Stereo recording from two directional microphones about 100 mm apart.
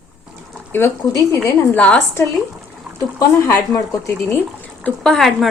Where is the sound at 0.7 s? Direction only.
25° left (ahead or behind).